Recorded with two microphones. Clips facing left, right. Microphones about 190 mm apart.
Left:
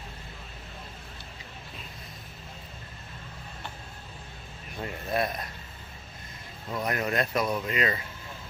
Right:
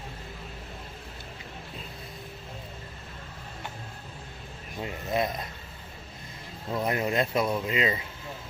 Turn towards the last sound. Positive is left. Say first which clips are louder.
# right 1 dB
turn(degrees=-20)  # may be behind; listen again after turning